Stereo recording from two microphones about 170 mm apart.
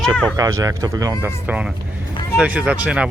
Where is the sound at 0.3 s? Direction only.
20° right (ahead or behind).